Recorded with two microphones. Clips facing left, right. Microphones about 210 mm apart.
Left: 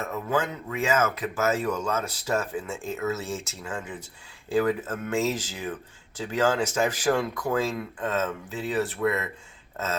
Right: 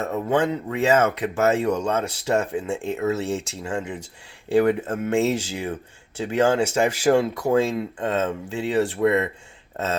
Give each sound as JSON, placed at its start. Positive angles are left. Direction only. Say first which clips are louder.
{"t": 0.0, "sound": "speech", "louder": "right 6 dB", "side_deg": -35}